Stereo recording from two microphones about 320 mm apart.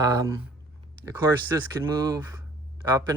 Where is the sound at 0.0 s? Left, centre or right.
Centre.